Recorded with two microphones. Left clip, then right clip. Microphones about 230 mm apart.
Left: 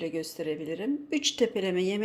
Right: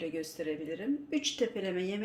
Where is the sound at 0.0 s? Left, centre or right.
Left.